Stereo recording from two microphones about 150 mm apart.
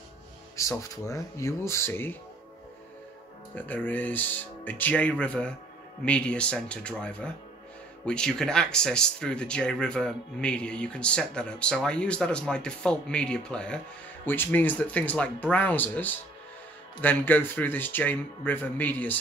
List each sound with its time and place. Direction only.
0.6 s speech: 20° left (ahead or behind)
3.5 s speech: 10° left (ahead or behind)